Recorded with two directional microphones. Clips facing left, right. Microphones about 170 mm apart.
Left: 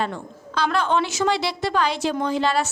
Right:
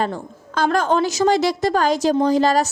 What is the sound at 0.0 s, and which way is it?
A woman's voice, 45° right (ahead or behind).